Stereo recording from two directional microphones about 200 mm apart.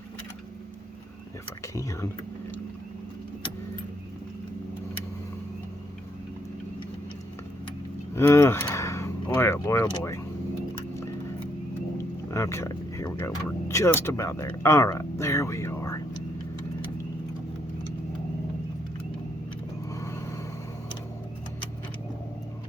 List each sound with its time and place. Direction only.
1.6 s speech: 15° left (ahead or behind)
8.1 s speech: 15° left (ahead or behind)
10.9 s a sound: 15° left (ahead or behind)
12.3 s speech: 15° left (ahead or behind)